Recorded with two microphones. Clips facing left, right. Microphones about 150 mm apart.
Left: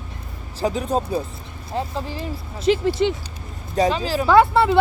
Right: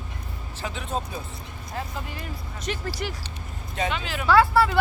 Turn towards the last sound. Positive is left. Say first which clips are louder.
# left 4 dB
turn(degrees=20)  # may be behind; listen again after turning